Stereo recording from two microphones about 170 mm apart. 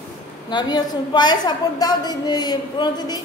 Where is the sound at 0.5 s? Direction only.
25° left (ahead or behind).